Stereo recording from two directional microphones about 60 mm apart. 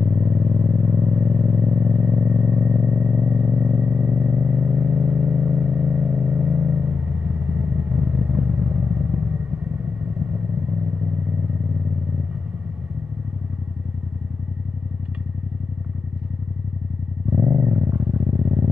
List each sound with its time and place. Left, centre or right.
0.0 s vehicle: right
17.3 s vehicle: right